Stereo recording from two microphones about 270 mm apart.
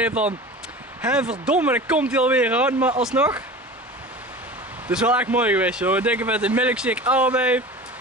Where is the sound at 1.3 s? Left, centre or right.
Centre.